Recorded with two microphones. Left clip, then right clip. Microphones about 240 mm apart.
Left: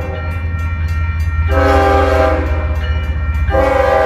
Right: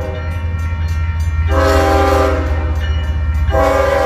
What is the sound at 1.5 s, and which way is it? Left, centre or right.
Train, right.